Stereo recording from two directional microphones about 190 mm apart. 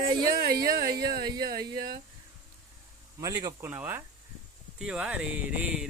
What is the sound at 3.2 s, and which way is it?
Speech, 20° right (ahead or behind).